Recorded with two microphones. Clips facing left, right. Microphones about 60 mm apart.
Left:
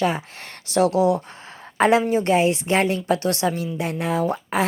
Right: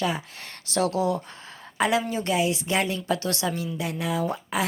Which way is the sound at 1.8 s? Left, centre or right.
Left.